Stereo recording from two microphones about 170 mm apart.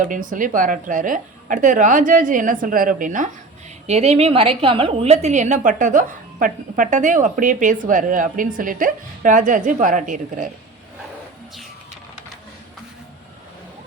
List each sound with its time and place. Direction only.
0.0 s a woman's voice: 50° right (ahead or behind)
3.8 s a woman's voice: 40° right (ahead or behind)